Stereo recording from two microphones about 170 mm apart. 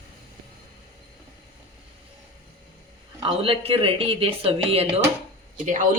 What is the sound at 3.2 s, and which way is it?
Speech, 35° right (ahead or behind).